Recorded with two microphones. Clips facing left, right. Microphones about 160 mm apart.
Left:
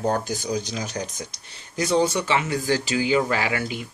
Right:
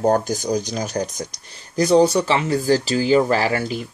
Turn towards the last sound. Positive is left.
turn(degrees=-40)  # may be behind; listen again after turning